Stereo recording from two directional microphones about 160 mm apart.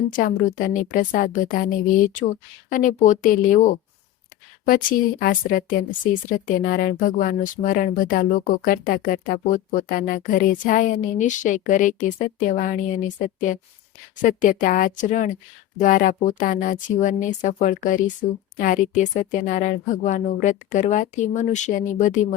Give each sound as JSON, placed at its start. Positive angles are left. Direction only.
{"t": 0.1, "sound": "a woman's voice", "side_deg": 55}